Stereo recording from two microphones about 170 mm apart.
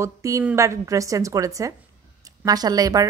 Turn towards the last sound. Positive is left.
turn(degrees=-20)  # may be behind; listen again after turning